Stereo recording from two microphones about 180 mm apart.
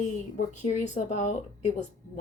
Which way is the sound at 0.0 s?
45° left (ahead or behind).